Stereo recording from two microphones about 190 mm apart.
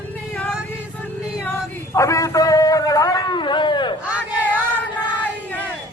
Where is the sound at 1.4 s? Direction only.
10° left (ahead or behind).